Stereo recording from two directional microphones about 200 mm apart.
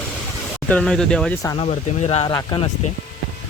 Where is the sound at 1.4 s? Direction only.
20° left (ahead or behind).